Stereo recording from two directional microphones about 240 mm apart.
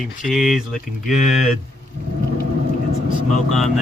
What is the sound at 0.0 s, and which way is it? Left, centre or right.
Speech, centre.